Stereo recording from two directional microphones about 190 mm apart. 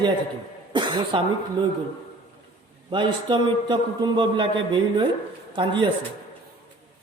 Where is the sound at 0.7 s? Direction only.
25° right (ahead or behind).